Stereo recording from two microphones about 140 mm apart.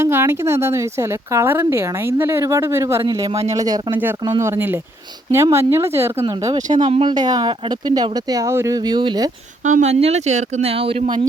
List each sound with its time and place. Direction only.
0.0 s speech: 20° right (ahead or behind)
6.2 s speech: 30° right (ahead or behind)
9.6 s speech: 55° right (ahead or behind); by 11.3 s 35° right (ahead or behind)